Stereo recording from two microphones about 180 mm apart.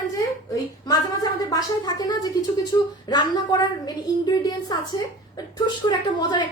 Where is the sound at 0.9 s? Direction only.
20° left (ahead or behind).